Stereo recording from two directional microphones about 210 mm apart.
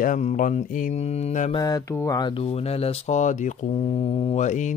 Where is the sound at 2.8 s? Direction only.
35° left (ahead or behind).